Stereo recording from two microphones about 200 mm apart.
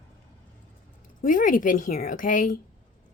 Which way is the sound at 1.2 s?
40° left (ahead or behind).